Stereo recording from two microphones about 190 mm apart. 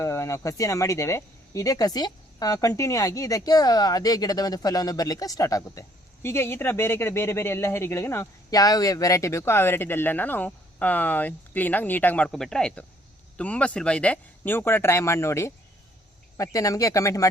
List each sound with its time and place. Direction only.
0.0 s speech: 15° left (ahead or behind)